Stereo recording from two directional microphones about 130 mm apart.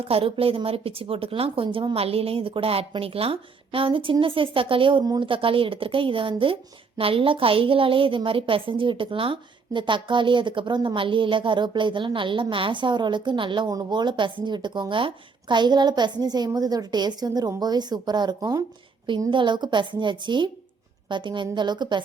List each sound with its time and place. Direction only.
0.0 s a woman's voice: 45° right (ahead or behind)